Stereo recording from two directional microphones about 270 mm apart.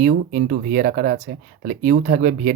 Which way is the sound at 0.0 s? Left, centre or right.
Right.